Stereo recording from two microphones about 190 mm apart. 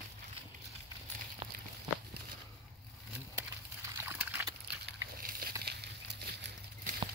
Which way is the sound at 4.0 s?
10° right (ahead or behind).